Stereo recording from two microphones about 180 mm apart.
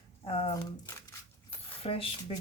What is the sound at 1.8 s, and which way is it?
Speech, 30° left (ahead or behind).